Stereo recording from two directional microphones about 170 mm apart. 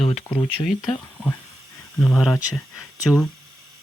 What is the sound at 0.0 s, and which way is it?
Speech, 5° left (ahead or behind).